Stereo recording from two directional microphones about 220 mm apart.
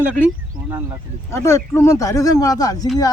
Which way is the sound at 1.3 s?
10° left (ahead or behind).